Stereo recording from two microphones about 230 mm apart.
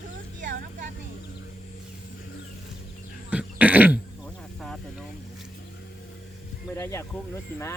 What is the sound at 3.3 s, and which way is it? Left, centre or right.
Throat clearing, centre.